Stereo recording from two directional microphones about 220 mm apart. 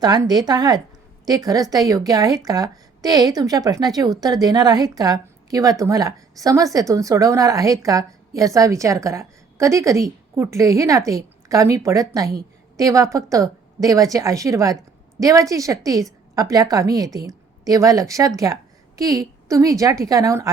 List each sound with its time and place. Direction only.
0.0 s a woman's voice: 20° right (ahead or behind)